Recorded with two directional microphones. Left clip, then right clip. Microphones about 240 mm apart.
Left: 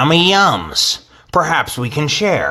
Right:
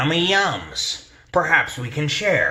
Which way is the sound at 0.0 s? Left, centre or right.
Left.